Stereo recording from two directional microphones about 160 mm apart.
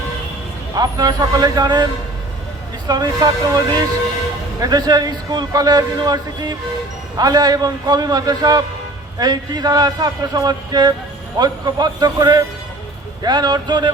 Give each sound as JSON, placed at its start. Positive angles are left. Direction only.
{"t": 0.8, "sound": "a man's voice", "side_deg": -25}
{"t": 4.6, "sound": "a man's voice", "side_deg": -25}